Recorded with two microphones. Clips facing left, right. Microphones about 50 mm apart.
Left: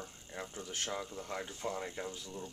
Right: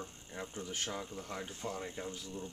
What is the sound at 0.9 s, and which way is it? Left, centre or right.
Speech, centre.